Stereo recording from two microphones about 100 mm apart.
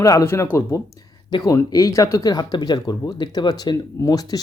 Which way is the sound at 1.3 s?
50° left (ahead or behind).